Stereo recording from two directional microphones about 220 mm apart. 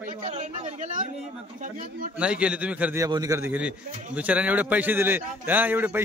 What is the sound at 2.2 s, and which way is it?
A man's voice, 5° right (ahead or behind).